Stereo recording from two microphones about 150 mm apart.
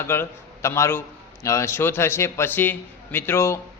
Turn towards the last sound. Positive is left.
turn(degrees=20)  # may be behind; listen again after turning